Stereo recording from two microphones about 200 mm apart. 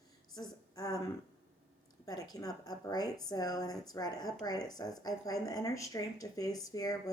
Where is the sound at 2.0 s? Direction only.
20° left (ahead or behind).